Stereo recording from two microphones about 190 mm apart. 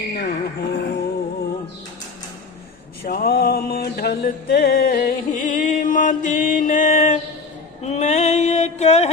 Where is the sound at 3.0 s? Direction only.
55° left (ahead or behind).